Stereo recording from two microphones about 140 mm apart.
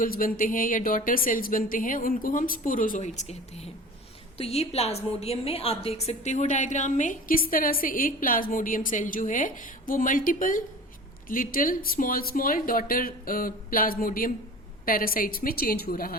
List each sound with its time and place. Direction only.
0.0 s a woman's voice: 90° left
11.3 s speech: 90° left